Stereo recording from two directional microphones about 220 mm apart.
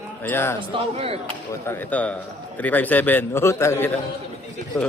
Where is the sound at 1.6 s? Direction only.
10° left (ahead or behind).